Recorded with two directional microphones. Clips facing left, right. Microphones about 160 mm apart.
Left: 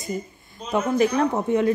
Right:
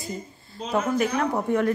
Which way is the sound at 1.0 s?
30° left (ahead or behind).